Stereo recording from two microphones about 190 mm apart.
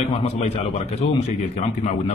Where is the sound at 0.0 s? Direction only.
30° left (ahead or behind).